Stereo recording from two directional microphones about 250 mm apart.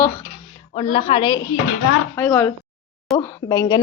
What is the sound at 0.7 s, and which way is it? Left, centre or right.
A woman's voice, centre.